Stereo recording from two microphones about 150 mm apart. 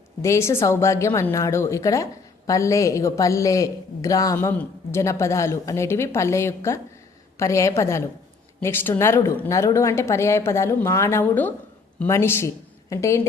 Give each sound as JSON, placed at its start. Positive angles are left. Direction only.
{"t": 0.2, "sound": "a man's voice", "side_deg": 20}